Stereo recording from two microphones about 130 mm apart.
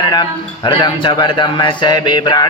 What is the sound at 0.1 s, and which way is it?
Speech, 35° left (ahead or behind).